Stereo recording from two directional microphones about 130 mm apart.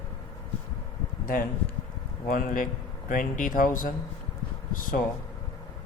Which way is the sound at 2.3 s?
90° left.